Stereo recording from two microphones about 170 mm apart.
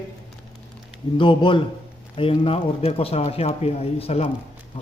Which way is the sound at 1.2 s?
30° left (ahead or behind).